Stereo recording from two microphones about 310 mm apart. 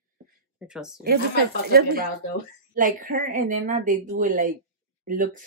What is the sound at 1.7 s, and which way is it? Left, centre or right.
A woman's voice, right.